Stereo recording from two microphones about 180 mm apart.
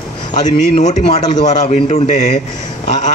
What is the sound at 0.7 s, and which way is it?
A man's voice, 40° left (ahead or behind).